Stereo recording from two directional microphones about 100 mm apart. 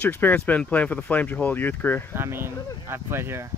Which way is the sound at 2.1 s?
25° right (ahead or behind).